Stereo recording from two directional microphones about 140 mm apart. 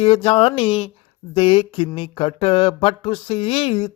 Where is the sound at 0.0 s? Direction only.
40° left (ahead or behind).